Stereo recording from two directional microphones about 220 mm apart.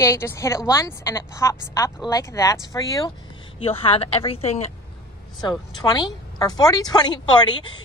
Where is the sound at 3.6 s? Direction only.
25° left (ahead or behind).